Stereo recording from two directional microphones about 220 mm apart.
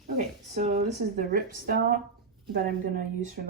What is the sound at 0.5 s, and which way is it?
Speech, 40° right (ahead or behind).